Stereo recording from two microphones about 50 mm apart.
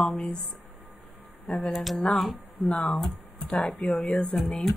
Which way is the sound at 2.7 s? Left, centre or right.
Left.